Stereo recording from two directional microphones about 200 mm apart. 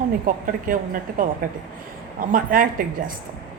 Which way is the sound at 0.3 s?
45° right (ahead or behind).